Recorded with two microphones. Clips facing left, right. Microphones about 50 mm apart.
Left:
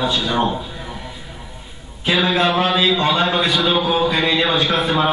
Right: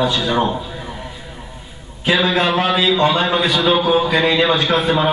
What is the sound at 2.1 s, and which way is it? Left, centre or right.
A man's voice, right.